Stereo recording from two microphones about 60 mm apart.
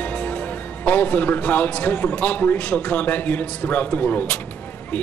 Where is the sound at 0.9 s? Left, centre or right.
Left.